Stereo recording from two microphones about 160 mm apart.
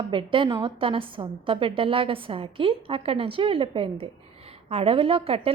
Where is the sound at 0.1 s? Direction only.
30° right (ahead or behind).